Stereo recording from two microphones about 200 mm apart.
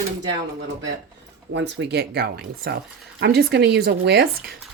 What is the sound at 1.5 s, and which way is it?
Speech, 60° right (ahead or behind).